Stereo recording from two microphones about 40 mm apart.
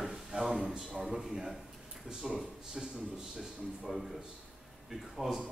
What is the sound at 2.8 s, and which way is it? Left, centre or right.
A man's voice, centre.